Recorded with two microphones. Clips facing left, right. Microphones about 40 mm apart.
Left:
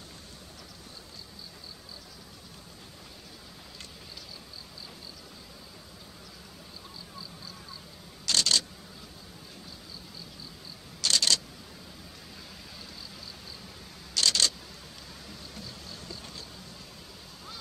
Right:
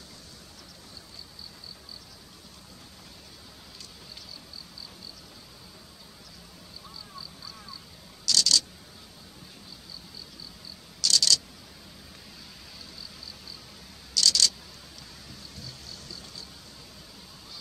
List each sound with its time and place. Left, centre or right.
8.3 s camera: left
11.0 s camera: left
14.1 s camera: left
15.6 s vehicle: left